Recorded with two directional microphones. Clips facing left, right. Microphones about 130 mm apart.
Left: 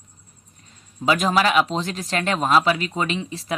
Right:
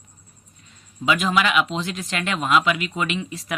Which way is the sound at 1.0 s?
40° left (ahead or behind).